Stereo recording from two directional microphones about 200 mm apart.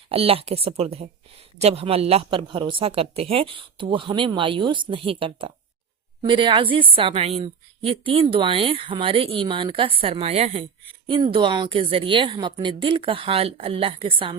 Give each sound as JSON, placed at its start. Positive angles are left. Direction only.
{"t": 0.1, "sound": "a woman's voice", "side_deg": -30}